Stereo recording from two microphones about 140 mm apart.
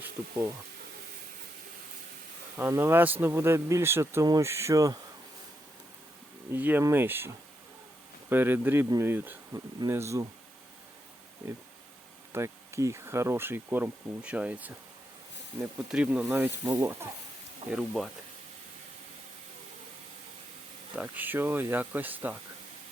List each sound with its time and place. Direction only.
0.0 s speech: 15° right (ahead or behind)
2.6 s speech: 15° right (ahead or behind)
6.5 s speech: 15° right (ahead or behind)
8.3 s speech: 15° right (ahead or behind)
12.3 s speech: 20° right (ahead or behind)
17.7 s speech: 5° right (ahead or behind)
20.9 s speech: 10° right (ahead or behind)